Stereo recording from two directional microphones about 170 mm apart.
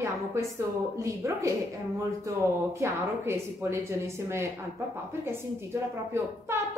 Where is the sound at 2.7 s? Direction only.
15° right (ahead or behind).